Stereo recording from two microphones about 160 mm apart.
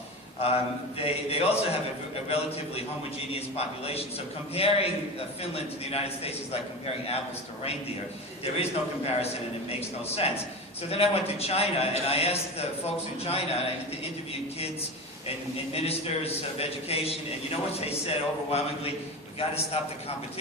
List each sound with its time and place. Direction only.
0.3 s a man's voice: 40° left (ahead or behind)
9.0 s a man's voice: 40° left (ahead or behind)
15.7 s a man's voice: 40° left (ahead or behind)